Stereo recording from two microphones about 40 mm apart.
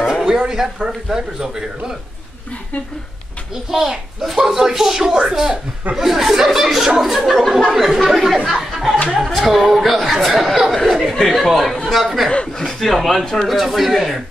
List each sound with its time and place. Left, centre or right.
0.2 s a man's voice: centre
3.7 s a man's voice: centre
12.5 s speech: centre
13.5 s speech: centre